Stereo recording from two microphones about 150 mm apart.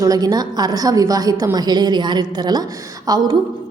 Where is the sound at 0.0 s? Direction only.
25° right (ahead or behind).